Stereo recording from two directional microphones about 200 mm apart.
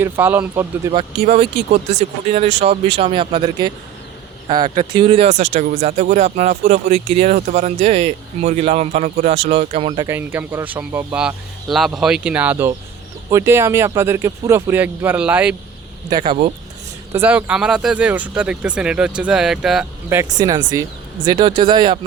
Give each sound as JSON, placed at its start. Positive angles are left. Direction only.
{"t": 0.0, "sound": "speech", "side_deg": -10}
{"t": 0.9, "sound": "speech", "side_deg": -30}
{"t": 16.0, "sound": "speech", "side_deg": -25}
{"t": 17.1, "sound": "speech", "side_deg": -10}
{"t": 20.4, "sound": "speech", "side_deg": -20}